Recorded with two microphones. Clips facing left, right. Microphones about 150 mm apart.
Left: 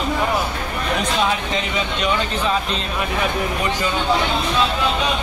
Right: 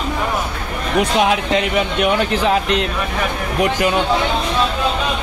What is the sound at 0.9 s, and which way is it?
Speech, 70° right (ahead or behind).